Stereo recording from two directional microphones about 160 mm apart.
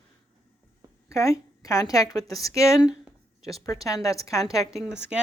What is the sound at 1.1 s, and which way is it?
A woman's voice, 20° left (ahead or behind).